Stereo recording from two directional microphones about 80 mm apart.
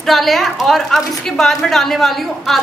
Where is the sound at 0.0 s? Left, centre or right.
Centre.